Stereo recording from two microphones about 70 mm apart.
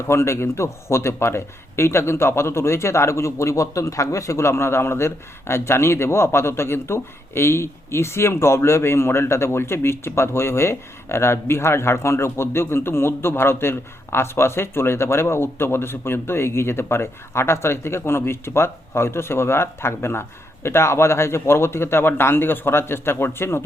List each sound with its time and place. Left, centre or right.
0.1 s speech: left